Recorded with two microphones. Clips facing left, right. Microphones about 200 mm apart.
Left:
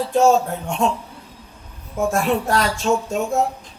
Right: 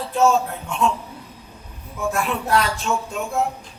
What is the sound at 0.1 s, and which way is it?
Speech, 45° left (ahead or behind).